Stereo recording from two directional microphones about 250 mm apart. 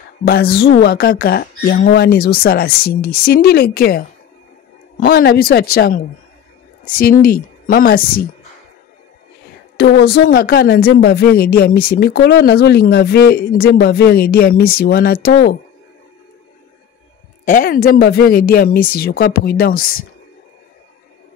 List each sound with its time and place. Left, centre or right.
0.2 s speech: left
5.0 s speech: left
9.8 s speech: left
17.5 s speech: left